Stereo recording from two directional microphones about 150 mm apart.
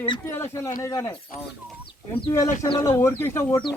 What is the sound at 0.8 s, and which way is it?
Speech, 20° left (ahead or behind).